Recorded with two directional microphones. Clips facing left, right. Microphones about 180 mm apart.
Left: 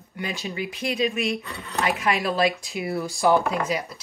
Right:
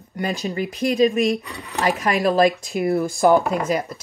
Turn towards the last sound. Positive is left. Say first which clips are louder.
# right 4 dB
turn(degrees=-50)  # may be behind; listen again after turning